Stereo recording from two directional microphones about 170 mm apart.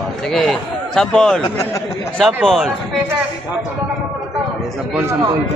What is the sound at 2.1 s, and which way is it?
Speech, 5° left (ahead or behind).